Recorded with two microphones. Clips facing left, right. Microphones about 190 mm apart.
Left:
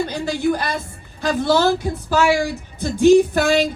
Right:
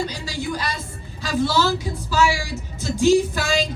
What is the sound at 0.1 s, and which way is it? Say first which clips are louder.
Speech: left 8 dB; 55° left (ahead or behind).